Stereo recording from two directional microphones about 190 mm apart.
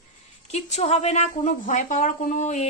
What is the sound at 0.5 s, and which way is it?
A woman's voice, 35° left (ahead or behind).